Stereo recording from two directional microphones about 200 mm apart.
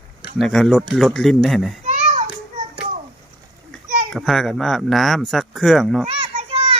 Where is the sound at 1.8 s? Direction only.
35° right (ahead or behind).